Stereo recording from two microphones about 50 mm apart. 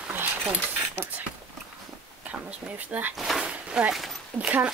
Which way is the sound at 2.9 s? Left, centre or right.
Right.